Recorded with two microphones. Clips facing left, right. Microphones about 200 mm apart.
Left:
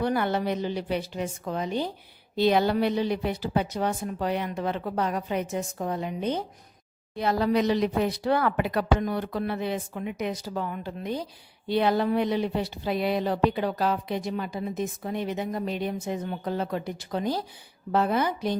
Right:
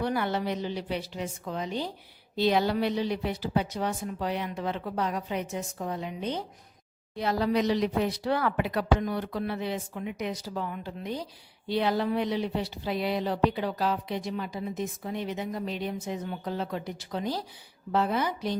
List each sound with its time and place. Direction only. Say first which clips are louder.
0.0 s speech: left 3 dB; 50° left (ahead or behind)